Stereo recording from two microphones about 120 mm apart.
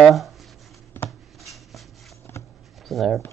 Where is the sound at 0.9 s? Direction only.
20° left (ahead or behind).